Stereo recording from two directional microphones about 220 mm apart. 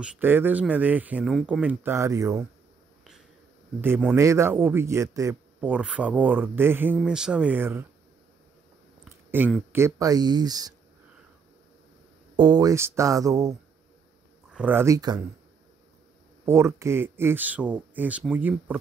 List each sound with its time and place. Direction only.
0.0 s speech: 10° right (ahead or behind)
3.8 s speech: 10° right (ahead or behind)
9.3 s speech: 10° right (ahead or behind)
12.4 s speech: 20° right (ahead or behind)
16.4 s speech: 10° right (ahead or behind)